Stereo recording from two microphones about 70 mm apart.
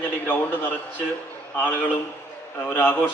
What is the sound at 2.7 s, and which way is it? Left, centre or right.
Speech, left.